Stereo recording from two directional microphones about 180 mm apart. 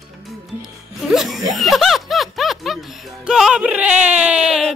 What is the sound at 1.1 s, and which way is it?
Speech, centre (ahead or behind).